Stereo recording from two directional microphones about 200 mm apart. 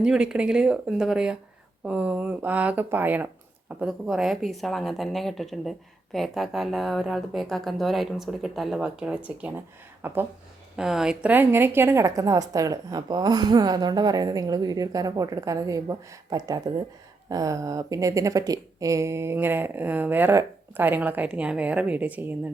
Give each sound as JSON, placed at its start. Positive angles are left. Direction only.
{"t": 0.0, "sound": "a woman's voice", "side_deg": -5}